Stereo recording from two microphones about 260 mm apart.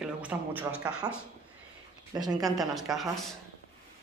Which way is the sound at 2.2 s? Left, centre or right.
Centre.